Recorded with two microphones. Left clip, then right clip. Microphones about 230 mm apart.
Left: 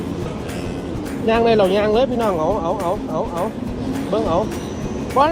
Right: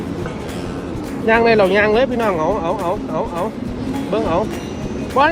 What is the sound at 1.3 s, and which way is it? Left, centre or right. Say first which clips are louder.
Speech: right 2 dB; right.